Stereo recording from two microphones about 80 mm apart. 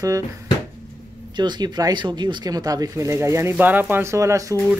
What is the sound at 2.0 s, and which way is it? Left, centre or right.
Speech, right.